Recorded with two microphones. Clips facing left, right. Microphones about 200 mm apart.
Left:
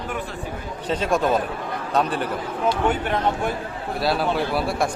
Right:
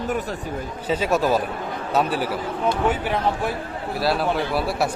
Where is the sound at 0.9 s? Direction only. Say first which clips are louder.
Right 1 dB; 5° right (ahead or behind).